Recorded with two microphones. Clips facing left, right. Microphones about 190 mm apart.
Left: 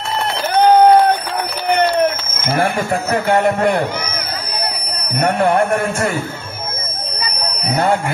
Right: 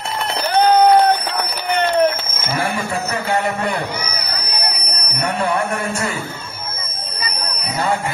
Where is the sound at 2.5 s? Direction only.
50° left (ahead or behind).